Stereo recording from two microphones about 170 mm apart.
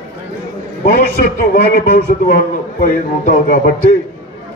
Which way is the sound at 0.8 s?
60° left (ahead or behind).